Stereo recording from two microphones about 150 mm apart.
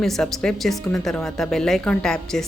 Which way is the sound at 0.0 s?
Centre (ahead or behind).